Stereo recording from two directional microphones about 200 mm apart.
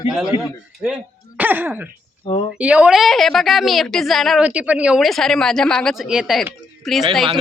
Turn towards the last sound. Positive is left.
turn(degrees=0)  # may be behind; listen again after turning